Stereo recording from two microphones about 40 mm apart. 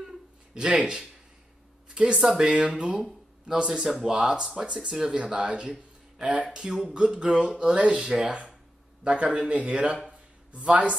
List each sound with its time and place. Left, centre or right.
0.6 s speech: centre
1.9 s a sound: right
2.1 s speech: centre
4.7 s speech: centre
5.2 s speech: right
8.3 s speech: right